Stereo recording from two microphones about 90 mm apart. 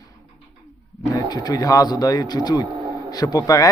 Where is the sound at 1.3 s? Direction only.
50° left (ahead or behind).